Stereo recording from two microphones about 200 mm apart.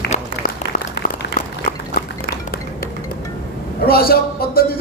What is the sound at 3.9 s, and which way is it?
Speech, 50° left (ahead or behind).